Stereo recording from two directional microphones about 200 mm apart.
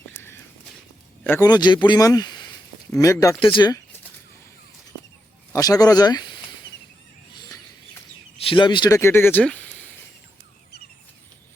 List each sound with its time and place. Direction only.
1.2 s a man's voice: 15° left (ahead or behind)
5.5 s a man's voice: 20° left (ahead or behind)
8.4 s speech: 25° left (ahead or behind); by 9.9 s 10° left (ahead or behind)